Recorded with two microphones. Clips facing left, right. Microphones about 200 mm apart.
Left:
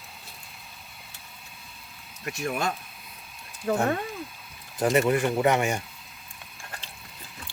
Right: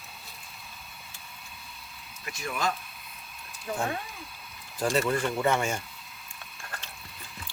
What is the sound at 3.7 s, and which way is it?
Speech, 50° left (ahead or behind).